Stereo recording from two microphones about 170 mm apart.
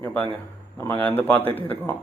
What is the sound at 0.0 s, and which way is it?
A man's voice, 10° left (ahead or behind).